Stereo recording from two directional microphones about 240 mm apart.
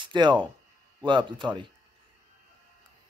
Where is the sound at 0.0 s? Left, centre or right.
Centre.